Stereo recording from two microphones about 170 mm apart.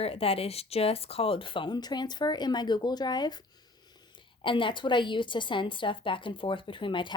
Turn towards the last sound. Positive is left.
turn(degrees=30)  # may be behind; listen again after turning